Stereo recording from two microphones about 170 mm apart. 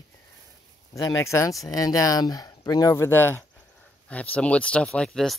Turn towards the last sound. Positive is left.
turn(degrees=5)  # may be behind; listen again after turning